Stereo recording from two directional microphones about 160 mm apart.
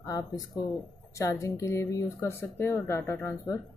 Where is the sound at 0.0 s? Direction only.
20° left (ahead or behind).